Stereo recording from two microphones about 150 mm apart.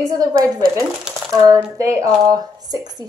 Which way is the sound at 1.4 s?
20° right (ahead or behind).